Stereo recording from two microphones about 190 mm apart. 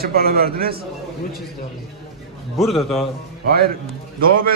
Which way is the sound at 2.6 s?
Centre (ahead or behind).